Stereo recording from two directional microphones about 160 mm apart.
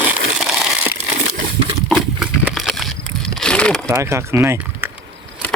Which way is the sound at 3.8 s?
15° right (ahead or behind).